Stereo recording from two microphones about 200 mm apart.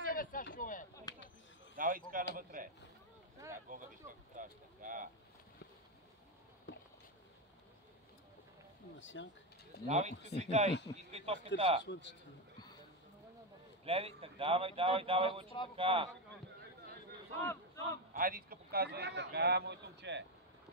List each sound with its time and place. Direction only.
0.1 s a sound: 45° left (ahead or behind)
0.6 s speech: 40° left (ahead or behind)
1.1 s a sound: 20° left (ahead or behind)
1.8 s a man's voice: 45° right (ahead or behind)
6.7 s a sound: 60° left (ahead or behind)
9.0 s speech: 65° left (ahead or behind)
9.8 s speech: 35° right (ahead or behind)
11.8 s a man's voice: 60° left (ahead or behind)
13.8 s speech: 30° right (ahead or behind)
17.4 s speech: 15° left (ahead or behind)
18.1 s a man's voice: 45° right (ahead or behind)